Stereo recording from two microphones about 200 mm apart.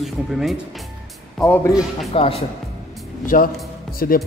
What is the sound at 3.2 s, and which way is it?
Speech, 45° left (ahead or behind).